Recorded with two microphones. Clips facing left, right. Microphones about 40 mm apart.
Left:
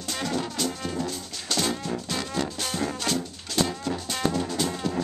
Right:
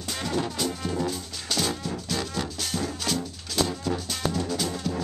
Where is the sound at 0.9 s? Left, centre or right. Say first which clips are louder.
Right 2 dB; centre.